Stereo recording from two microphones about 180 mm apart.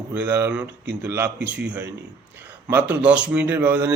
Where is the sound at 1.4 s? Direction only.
70° right (ahead or behind).